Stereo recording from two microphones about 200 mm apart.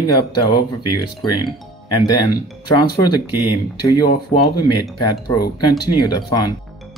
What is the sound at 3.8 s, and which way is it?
Speech, 20° left (ahead or behind).